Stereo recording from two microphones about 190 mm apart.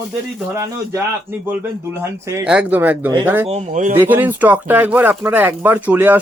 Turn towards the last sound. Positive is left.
turn(degrees=-10)  # may be behind; listen again after turning